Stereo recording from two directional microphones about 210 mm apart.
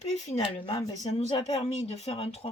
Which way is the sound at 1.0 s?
35° left (ahead or behind).